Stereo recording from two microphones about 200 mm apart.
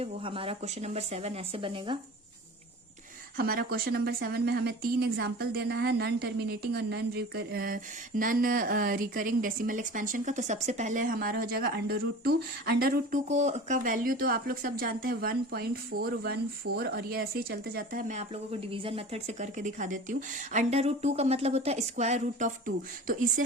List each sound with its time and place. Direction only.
0.0 s speech: 25° right (ahead or behind)
3.3 s speech: 50° right (ahead or behind)